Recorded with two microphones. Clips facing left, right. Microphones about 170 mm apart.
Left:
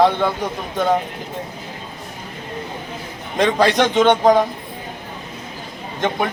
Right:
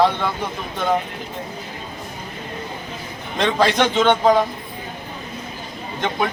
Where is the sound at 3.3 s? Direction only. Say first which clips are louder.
Left 2 dB; 15° left (ahead or behind).